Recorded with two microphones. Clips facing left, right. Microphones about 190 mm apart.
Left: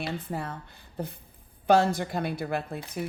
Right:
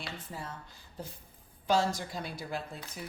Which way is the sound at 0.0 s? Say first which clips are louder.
Left 9 dB; 60° left (ahead or behind).